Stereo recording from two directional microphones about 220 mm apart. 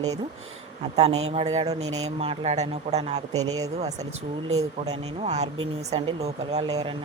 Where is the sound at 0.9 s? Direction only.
25° right (ahead or behind).